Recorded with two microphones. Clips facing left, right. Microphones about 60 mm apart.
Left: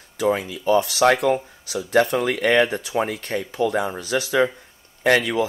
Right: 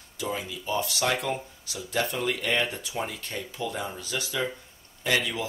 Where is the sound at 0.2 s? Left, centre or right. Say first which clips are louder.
Left 11 dB; left.